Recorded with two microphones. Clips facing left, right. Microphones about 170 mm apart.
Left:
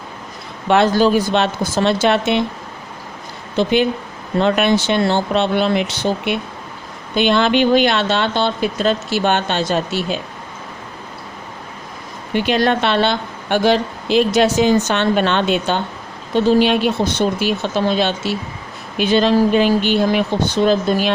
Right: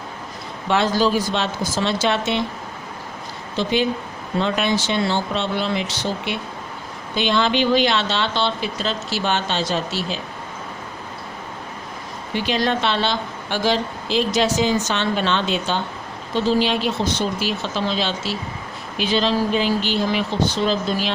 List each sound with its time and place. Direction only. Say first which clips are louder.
0.7 s a woman's voice: left 5 dB; 60° left (ahead or behind)
3.6 s a woman's voice: left 5 dB; 60° left (ahead or behind)
12.3 s a woman's voice: left 5 dB; 60° left (ahead or behind)